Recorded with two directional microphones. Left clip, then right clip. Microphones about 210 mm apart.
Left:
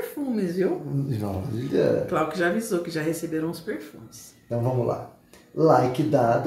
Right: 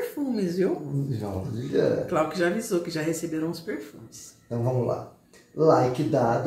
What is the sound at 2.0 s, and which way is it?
A woman's voice, 5° left (ahead or behind).